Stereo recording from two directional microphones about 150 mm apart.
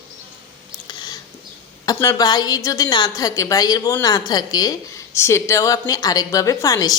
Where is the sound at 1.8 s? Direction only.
25° left (ahead or behind).